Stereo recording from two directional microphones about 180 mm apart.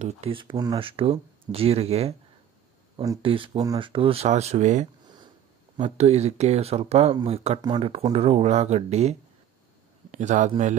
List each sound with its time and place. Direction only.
0.0 s speech: 30° right (ahead or behind)
3.2 s speech: 30° right (ahead or behind)
10.1 s a man's voice: 45° right (ahead or behind)